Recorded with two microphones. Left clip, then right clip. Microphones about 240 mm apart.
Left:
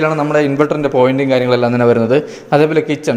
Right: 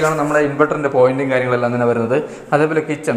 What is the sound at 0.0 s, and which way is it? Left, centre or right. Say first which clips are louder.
A man's voice: left 2 dB; left.